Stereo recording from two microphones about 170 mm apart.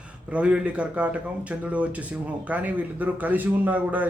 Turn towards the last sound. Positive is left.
turn(degrees=-10)  # may be behind; listen again after turning